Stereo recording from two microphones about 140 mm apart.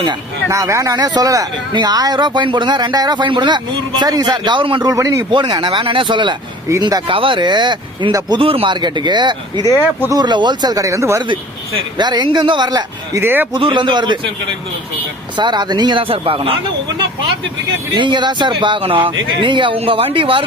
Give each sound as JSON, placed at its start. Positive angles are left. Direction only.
{"t": 0.1, "sound": "speech", "side_deg": -25}
{"t": 4.9, "sound": "speech", "side_deg": -25}
{"t": 5.3, "sound": "speech", "side_deg": -35}
{"t": 7.1, "sound": "speech", "side_deg": -40}
{"t": 9.7, "sound": "speech", "side_deg": -20}
{"t": 11.3, "sound": "speech", "side_deg": -35}
{"t": 13.1, "sound": "speech", "side_deg": -15}
{"t": 13.5, "sound": "speech", "side_deg": -35}
{"t": 15.4, "sound": "speech", "side_deg": -30}
{"t": 17.9, "sound": "speech", "side_deg": -35}